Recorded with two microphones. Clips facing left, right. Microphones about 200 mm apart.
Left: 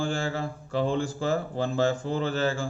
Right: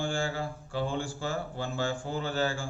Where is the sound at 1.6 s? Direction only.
40° left (ahead or behind).